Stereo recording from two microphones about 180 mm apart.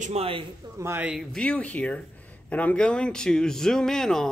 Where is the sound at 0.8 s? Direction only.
10° right (ahead or behind).